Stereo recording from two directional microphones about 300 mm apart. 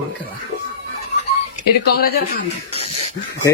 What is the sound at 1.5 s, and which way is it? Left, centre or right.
Speech, left.